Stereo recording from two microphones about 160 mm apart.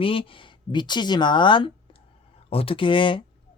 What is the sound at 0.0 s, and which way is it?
Speech, 35° left (ahead or behind).